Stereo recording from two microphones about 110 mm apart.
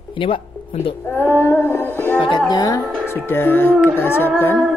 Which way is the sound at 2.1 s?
45° left (ahead or behind).